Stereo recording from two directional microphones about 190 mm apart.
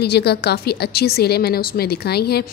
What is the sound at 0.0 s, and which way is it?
A woman's voice, 60° left (ahead or behind).